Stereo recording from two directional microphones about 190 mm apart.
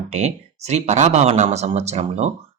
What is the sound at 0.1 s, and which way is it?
Speech, 35° right (ahead or behind).